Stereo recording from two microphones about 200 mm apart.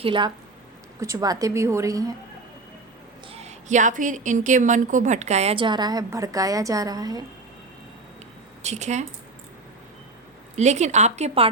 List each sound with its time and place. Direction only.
0.0 s a woman's voice: 25° right (ahead or behind)
3.2 s a woman's voice: 30° right (ahead or behind)
8.6 s a woman's voice: 35° right (ahead or behind)
10.5 s a woman's voice: 35° right (ahead or behind)